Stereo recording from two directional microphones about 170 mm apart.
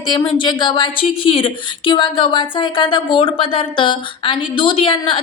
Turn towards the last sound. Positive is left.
turn(degrees=30)  # may be behind; listen again after turning